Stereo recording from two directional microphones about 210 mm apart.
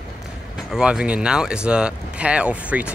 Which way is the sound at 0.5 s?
5° right (ahead or behind).